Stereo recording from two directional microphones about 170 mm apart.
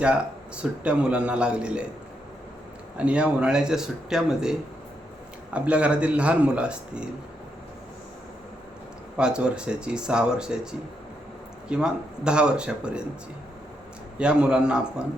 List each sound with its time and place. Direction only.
0.0 s a man's voice: 5° right (ahead or behind)
3.0 s a man's voice: 5° right (ahead or behind)
5.5 s a man's voice: 5° right (ahead or behind)
9.1 s a man's voice: 5° right (ahead or behind)
14.2 s a man's voice: 5° right (ahead or behind)